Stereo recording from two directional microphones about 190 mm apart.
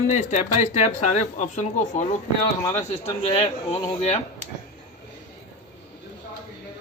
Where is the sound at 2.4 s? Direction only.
25° left (ahead or behind).